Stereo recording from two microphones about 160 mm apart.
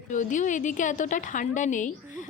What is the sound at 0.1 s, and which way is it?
Speech, 50° left (ahead or behind).